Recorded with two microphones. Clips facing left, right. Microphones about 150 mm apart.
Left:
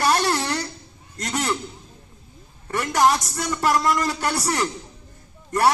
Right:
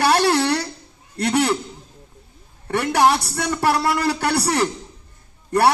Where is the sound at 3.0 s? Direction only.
30° right (ahead or behind).